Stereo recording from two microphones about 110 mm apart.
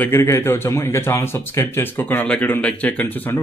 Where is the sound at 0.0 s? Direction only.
25° left (ahead or behind).